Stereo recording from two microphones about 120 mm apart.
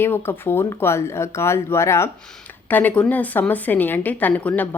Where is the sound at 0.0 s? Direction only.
20° left (ahead or behind).